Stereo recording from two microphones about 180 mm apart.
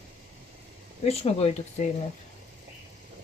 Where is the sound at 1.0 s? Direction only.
35° left (ahead or behind).